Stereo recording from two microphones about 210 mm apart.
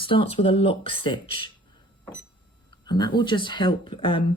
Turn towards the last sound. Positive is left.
turn(degrees=25)  # may be behind; listen again after turning